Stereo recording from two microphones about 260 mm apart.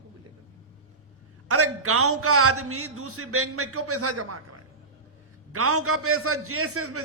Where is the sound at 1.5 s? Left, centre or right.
Right.